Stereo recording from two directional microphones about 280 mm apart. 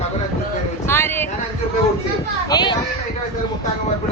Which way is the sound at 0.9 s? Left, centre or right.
Centre.